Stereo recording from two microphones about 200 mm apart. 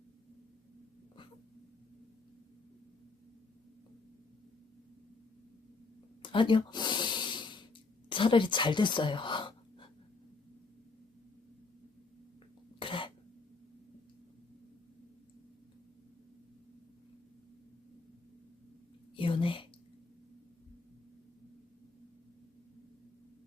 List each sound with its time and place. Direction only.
6.2 s snort: 25° left (ahead or behind)
8.1 s speech: 25° left (ahead or behind)
12.8 s cough: 25° left (ahead or behind)
19.1 s whispering: 25° left (ahead or behind)